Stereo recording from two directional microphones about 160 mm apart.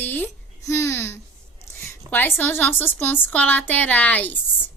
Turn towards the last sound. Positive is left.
turn(degrees=10)  # may be behind; listen again after turning